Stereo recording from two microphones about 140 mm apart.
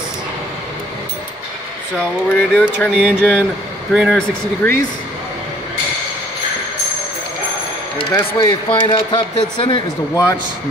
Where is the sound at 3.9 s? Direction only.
5° right (ahead or behind).